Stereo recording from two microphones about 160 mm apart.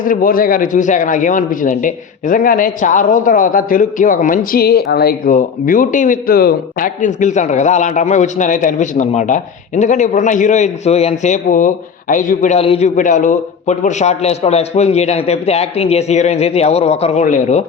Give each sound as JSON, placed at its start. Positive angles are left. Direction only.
{"t": 0.0, "sound": "a man's voice", "side_deg": 60}
{"t": 12.5, "sound": "a man's voice", "side_deg": 40}
{"t": 13.0, "sound": "a man's voice", "side_deg": 55}